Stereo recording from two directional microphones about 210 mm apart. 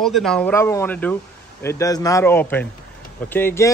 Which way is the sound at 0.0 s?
Centre (ahead or behind).